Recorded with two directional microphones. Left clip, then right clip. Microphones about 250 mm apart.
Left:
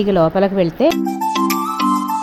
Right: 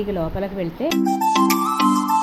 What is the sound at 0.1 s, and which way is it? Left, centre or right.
Speech, left.